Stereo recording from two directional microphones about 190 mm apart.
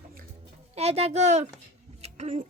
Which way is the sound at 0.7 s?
35° right (ahead or behind).